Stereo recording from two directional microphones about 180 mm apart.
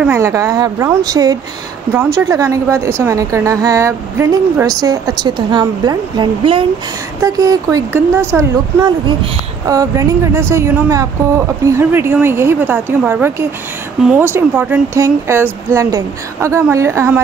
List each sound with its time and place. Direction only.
0.0 s a woman's voice: 15° right (ahead or behind)